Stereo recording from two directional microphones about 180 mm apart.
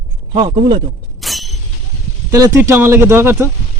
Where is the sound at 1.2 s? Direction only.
Centre (ahead or behind).